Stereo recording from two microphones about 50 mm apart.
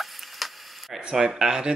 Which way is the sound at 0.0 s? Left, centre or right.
Centre.